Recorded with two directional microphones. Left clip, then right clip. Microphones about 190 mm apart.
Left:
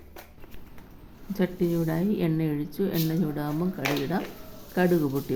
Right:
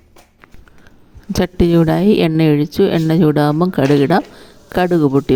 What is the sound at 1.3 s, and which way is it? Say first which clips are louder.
Speech: right 13 dB; 55° right (ahead or behind).